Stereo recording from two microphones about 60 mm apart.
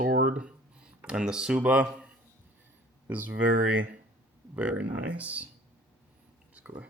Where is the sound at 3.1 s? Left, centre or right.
Right.